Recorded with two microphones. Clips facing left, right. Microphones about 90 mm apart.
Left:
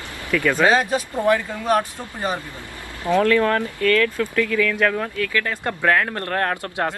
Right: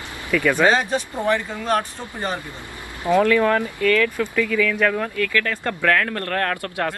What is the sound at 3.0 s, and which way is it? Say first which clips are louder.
Speech: right 1 dB; 15° right (ahead or behind).